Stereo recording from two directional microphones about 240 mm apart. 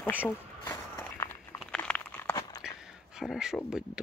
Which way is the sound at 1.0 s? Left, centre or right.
Centre.